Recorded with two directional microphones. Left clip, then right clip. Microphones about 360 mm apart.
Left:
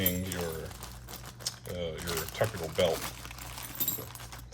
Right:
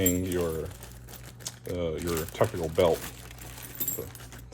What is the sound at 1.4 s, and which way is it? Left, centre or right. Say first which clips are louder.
Speech: right 4 dB; centre.